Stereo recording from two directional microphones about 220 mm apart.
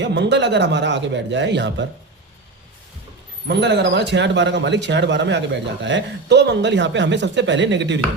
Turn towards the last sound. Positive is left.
turn(degrees=-55)  # may be behind; listen again after turning